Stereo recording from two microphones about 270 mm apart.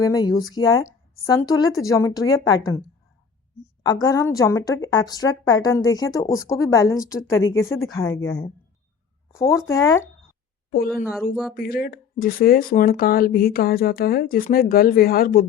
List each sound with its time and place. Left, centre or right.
0.0 s a woman's voice: centre
4.0 s a woman's voice: centre
10.7 s a woman's voice: left